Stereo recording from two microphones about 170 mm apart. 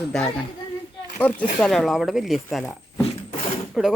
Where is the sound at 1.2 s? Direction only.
5° left (ahead or behind).